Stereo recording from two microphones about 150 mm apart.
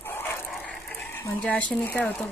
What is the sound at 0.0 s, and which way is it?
Vehicle, 15° left (ahead or behind).